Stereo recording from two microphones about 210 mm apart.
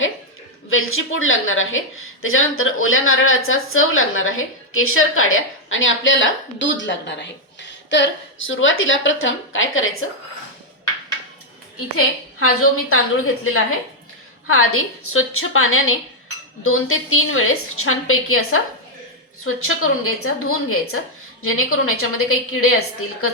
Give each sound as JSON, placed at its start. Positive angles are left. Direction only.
{"t": 0.7, "sound": "a woman's voice", "side_deg": 75}
{"t": 11.9, "sound": "a woman's voice", "side_deg": 90}